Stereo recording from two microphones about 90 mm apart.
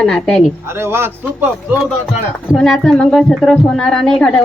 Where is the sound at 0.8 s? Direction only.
25° right (ahead or behind).